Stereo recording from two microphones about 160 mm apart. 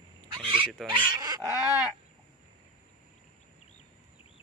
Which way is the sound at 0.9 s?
25° right (ahead or behind).